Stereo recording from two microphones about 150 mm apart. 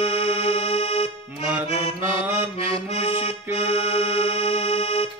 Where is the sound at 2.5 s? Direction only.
40° left (ahead or behind).